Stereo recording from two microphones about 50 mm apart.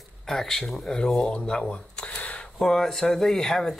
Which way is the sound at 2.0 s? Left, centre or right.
Left.